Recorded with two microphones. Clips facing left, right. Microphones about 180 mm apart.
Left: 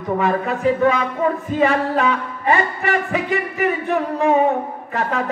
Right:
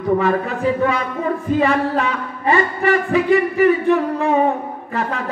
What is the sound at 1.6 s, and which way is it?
Speech, 35° right (ahead or behind).